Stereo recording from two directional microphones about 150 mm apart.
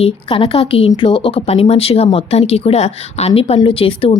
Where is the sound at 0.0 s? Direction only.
35° left (ahead or behind).